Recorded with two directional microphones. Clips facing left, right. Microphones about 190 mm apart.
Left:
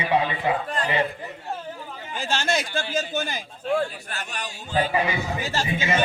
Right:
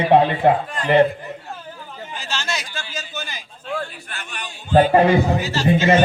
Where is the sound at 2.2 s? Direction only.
50° left (ahead or behind).